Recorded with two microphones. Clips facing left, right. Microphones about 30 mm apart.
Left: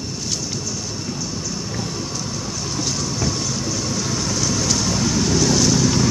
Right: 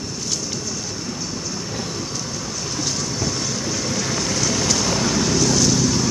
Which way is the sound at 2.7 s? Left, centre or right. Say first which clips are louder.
Left 1 dB; centre.